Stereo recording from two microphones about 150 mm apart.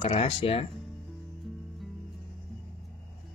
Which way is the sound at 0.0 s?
40° left (ahead or behind).